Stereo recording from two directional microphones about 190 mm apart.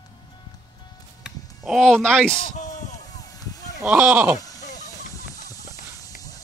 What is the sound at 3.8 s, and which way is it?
Speech, 5° right (ahead or behind).